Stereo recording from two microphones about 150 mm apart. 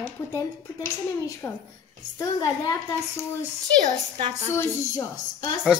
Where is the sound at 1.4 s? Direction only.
15° left (ahead or behind).